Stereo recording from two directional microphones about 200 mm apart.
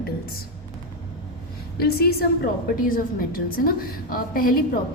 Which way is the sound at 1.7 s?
50° left (ahead or behind).